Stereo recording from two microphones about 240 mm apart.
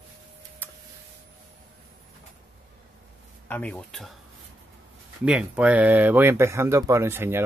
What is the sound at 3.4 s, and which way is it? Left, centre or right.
Speech, centre.